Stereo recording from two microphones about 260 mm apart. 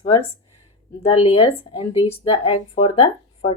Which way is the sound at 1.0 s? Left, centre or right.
Left.